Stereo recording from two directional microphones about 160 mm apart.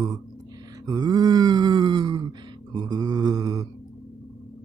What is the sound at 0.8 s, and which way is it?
Groan, 25° right (ahead or behind).